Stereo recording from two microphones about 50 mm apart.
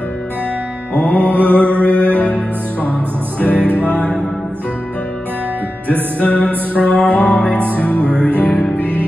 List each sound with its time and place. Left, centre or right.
0.9 s music: left
6.1 s music: left